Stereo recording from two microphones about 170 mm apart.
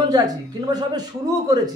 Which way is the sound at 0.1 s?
25° right (ahead or behind).